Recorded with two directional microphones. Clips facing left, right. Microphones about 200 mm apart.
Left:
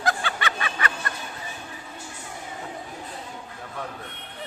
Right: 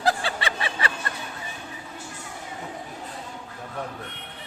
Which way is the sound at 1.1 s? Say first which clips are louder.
Even; 25° right (ahead or behind).